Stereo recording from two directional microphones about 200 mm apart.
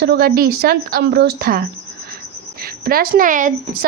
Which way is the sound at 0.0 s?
50° right (ahead or behind).